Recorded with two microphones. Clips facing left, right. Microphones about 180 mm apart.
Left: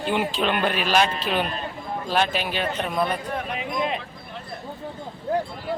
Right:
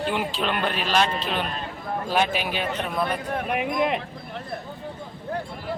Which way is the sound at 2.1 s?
10° right (ahead or behind).